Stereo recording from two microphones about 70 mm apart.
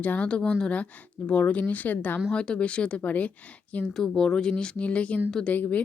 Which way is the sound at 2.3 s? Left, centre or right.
Centre.